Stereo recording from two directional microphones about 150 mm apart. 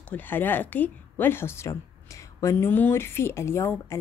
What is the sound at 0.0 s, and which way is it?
Speech, 10° left (ahead or behind).